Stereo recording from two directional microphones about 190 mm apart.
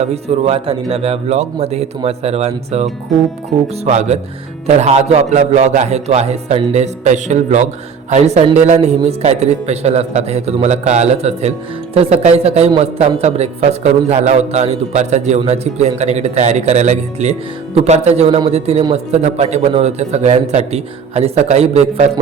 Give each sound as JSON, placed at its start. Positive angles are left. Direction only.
{"t": 0.0, "sound": "speech", "side_deg": -35}